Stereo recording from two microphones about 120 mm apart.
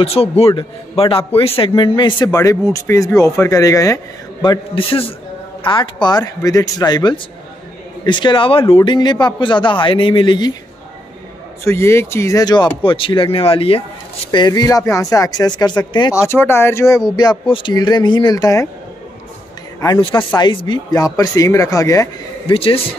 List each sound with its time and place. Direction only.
0.0 s speech: 55° left (ahead or behind); by 4.0 s 25° left (ahead or behind)
4.4 s speech: 45° left (ahead or behind)
8.8 s speech: 40° left (ahead or behind)
11.6 s speech: 20° left (ahead or behind)
12.8 s speech: 45° left (ahead or behind)
14.4 s speech: 35° left (ahead or behind)
16.2 s speech: 20° left (ahead or behind)
20.0 s speech: 45° left (ahead or behind); by 22.1 s 25° left (ahead or behind)
22.5 s speech: 50° left (ahead or behind)